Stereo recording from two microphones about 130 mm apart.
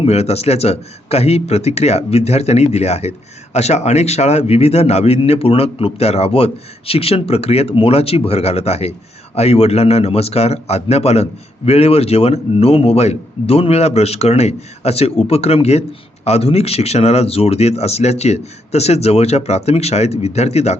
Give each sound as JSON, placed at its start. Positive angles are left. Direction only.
{"t": 0.0, "sound": "a man's voice", "side_deg": 55}